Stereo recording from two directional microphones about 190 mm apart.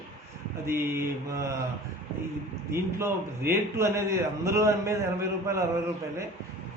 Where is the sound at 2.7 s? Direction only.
15° right (ahead or behind).